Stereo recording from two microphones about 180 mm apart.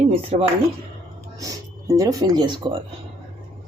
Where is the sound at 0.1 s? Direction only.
30° right (ahead or behind).